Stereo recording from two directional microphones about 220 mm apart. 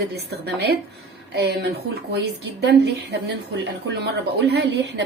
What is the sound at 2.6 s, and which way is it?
A woman's voice, 50° right (ahead or behind).